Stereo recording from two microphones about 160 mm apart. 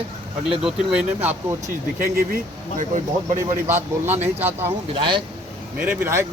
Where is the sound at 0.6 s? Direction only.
5° right (ahead or behind).